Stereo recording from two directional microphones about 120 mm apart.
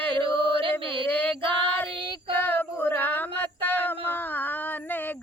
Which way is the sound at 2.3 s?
15° left (ahead or behind).